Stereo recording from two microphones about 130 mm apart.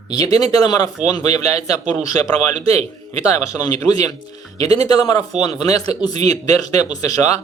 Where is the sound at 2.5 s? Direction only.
60° right (ahead or behind).